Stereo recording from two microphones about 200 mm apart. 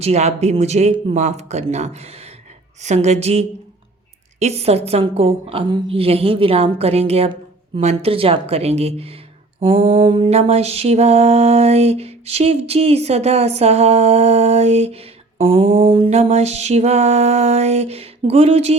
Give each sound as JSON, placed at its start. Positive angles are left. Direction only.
{"t": 0.0, "sound": "mantra", "side_deg": -35}